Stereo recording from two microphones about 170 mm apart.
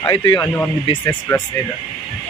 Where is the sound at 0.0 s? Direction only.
25° left (ahead or behind).